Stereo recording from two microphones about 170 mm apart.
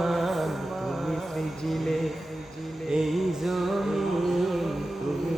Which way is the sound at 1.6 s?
Centre (ahead or behind).